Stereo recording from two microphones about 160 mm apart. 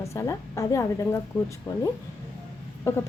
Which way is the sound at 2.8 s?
15° left (ahead or behind).